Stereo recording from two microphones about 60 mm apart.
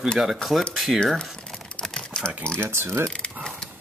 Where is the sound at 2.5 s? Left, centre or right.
Right.